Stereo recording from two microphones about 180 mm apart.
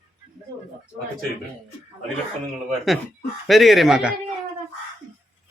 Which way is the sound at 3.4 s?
Centre (ahead or behind).